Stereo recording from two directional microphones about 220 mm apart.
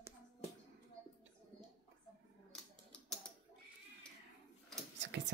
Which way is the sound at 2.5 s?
Centre (ahead or behind).